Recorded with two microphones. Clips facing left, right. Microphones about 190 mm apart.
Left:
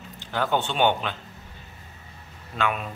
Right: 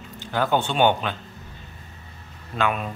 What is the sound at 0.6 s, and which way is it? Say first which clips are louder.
Speech: right 3 dB; 45° right (ahead or behind).